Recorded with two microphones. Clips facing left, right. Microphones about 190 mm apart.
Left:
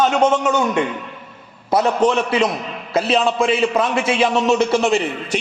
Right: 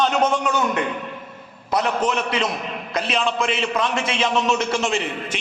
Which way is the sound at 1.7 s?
20° left (ahead or behind).